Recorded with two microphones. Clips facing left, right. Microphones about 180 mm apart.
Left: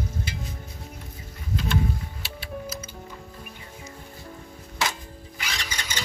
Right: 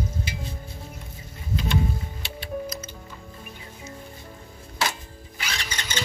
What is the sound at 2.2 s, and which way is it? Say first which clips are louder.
Music: right 5 dB; 5° left (ahead or behind).